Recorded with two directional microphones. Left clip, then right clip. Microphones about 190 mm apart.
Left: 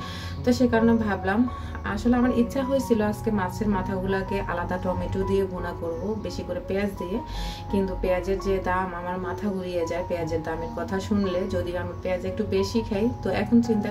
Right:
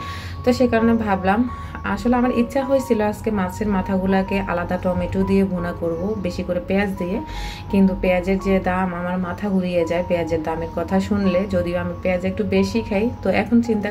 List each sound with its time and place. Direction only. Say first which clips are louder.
0.5 s speech: right 4 dB; 5° right (ahead or behind)
6.2 s speech: right 7 dB; 10° right (ahead or behind)
8.0 s speech: right 5 dB; 10° right (ahead or behind)